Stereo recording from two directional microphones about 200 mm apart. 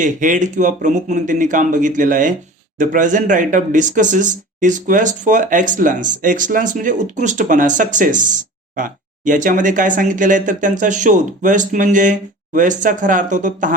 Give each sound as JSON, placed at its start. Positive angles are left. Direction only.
{"t": 0.0, "sound": "speech", "side_deg": -40}